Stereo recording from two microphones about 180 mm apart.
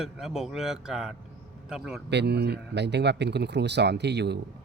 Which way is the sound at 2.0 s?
70° right (ahead or behind).